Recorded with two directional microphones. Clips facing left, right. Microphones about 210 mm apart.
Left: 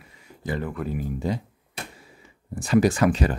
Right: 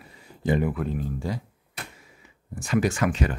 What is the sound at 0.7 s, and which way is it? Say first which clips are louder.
Speech: even; 5° left (ahead or behind).